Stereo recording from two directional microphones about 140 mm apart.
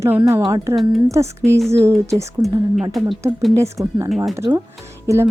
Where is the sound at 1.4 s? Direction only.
20° right (ahead or behind).